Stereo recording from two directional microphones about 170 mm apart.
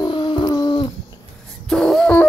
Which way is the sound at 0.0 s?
25° left (ahead or behind).